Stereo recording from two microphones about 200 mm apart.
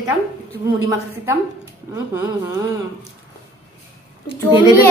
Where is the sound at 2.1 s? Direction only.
20° right (ahead or behind).